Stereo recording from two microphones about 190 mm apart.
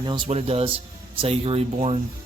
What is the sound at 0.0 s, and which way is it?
Speech, 25° right (ahead or behind).